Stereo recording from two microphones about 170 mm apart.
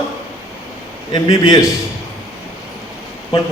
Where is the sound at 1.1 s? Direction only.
20° left (ahead or behind).